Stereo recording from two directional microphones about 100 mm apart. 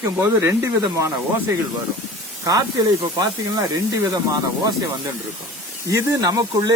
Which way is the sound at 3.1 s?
40° right (ahead or behind).